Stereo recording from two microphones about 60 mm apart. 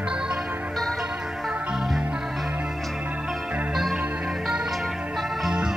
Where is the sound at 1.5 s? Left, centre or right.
Centre.